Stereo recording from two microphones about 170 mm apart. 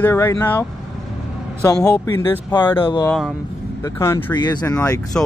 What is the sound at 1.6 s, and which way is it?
Speech, 20° left (ahead or behind).